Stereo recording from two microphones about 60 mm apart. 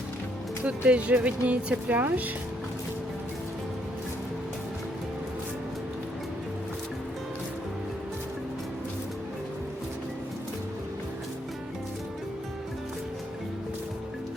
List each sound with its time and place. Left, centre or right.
0.6 s speech: right